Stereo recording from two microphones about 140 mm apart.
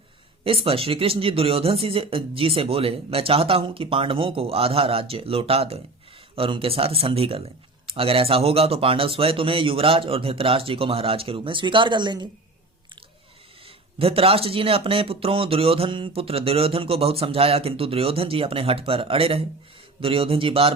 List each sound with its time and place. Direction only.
0.4 s speech: 40° right (ahead or behind)
14.0 s speech: 45° right (ahead or behind)